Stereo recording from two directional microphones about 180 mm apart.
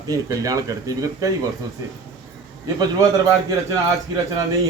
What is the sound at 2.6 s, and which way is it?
Speech, 20° right (ahead or behind).